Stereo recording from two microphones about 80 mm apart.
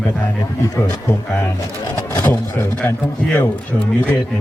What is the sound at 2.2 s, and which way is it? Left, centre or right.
Speech, left.